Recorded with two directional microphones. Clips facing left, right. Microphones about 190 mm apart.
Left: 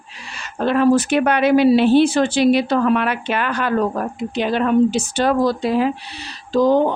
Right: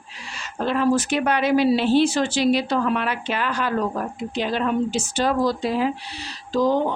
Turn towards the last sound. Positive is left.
turn(degrees=60)  # may be behind; listen again after turning